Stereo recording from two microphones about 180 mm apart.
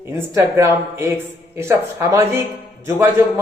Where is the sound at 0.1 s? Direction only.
15° right (ahead or behind).